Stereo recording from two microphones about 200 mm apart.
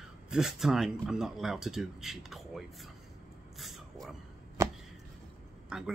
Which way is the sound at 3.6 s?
Centre (ahead or behind).